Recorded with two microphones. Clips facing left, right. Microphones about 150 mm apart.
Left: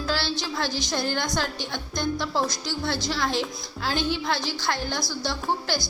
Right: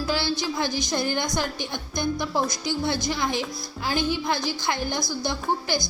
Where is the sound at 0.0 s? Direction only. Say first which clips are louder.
Right 2 dB; 15° right (ahead or behind).